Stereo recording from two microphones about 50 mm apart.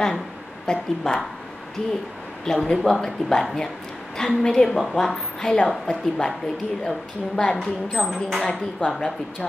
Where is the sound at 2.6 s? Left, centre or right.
Centre.